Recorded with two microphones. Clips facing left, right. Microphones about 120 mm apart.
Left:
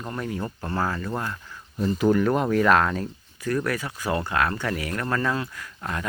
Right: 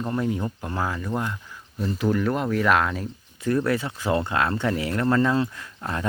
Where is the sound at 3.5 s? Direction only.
25° right (ahead or behind).